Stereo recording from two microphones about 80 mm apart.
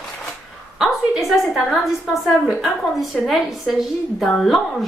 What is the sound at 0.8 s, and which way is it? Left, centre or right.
A woman's voice, centre.